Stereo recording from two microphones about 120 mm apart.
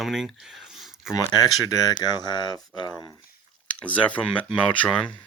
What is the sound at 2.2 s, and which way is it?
Speech, 35° left (ahead or behind).